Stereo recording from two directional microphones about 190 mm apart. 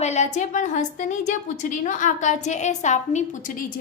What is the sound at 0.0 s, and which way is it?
A woman's voice, 35° left (ahead or behind).